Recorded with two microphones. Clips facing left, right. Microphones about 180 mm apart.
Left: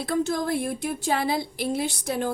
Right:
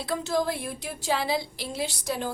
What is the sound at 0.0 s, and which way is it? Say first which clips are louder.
A woman's voice: left 2 dB; 50° left (ahead or behind).